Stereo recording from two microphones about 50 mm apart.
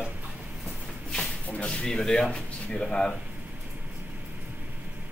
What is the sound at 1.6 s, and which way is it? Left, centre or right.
Speech, left.